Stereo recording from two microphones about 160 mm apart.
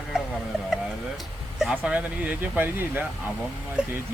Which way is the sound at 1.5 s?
5° right (ahead or behind).